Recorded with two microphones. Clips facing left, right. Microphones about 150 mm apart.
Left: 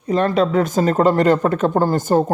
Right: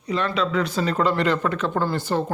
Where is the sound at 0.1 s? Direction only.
45° left (ahead or behind).